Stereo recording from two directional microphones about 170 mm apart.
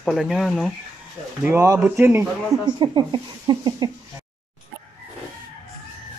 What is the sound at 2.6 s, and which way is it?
Speech, 25° right (ahead or behind).